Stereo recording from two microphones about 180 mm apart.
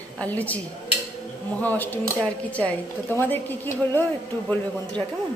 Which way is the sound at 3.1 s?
10° left (ahead or behind).